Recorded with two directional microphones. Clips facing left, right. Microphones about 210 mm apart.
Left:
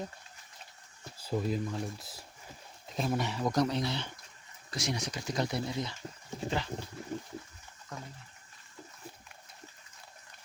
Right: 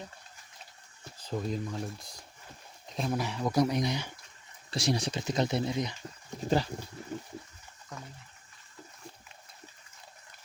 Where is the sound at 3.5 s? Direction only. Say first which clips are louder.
Right 4 dB; 10° right (ahead or behind).